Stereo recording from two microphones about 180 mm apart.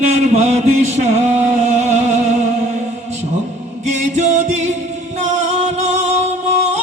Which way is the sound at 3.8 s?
40° right (ahead or behind).